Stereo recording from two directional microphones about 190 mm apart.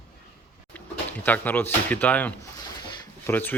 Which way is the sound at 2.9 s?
20° left (ahead or behind).